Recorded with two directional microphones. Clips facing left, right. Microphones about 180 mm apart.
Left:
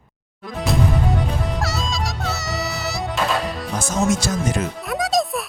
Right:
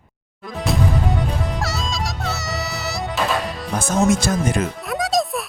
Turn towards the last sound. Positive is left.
turn(degrees=0)  # may be behind; listen again after turning